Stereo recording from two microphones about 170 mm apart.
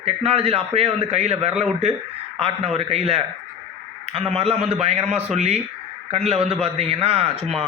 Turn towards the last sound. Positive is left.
turn(degrees=-35)  # may be behind; listen again after turning